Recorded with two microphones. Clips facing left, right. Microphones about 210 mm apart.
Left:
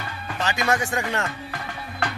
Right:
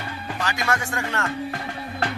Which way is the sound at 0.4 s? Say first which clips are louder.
Left 3 dB; 20° left (ahead or behind).